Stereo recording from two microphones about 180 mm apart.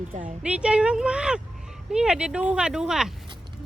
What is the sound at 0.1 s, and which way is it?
Speech, 45° right (ahead or behind).